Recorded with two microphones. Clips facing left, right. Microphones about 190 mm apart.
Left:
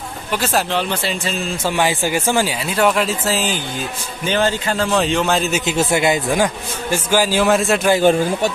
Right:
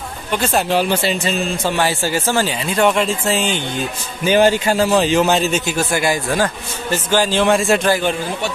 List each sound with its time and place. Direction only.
0.3 s speech: centre (ahead or behind)
1.7 s speech: 15° left (ahead or behind)
4.2 s speech: 10° right (ahead or behind)
5.7 s speech: 25° left (ahead or behind)
6.3 s a man's voice: 10° left (ahead or behind)
8.0 s speech: 40° left (ahead or behind)